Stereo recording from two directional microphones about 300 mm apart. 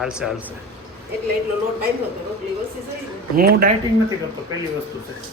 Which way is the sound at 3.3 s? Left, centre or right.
Right.